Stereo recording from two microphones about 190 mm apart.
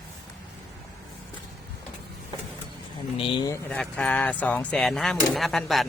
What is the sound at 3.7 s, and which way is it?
Speech, 5° left (ahead or behind).